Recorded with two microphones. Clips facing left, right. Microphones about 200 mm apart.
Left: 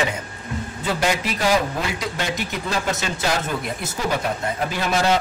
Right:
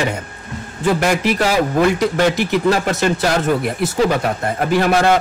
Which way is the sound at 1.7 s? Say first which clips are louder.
Right 11 dB; 60° right (ahead or behind).